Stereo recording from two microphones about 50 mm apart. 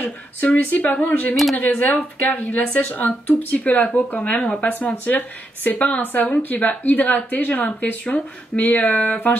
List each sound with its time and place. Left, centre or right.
0.0 s speech: left
1.3 s speech: centre
1.6 s speech: left